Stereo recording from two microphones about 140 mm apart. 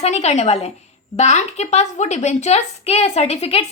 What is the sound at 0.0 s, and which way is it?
A woman's voice, 50° left (ahead or behind).